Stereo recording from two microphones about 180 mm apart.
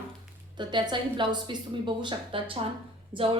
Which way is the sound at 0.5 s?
25° right (ahead or behind).